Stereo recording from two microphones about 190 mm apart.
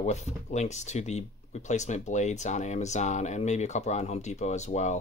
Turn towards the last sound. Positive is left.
turn(degrees=40)  # may be behind; listen again after turning